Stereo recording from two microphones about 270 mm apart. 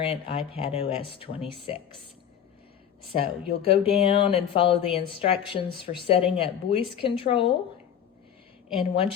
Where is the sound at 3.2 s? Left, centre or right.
Left.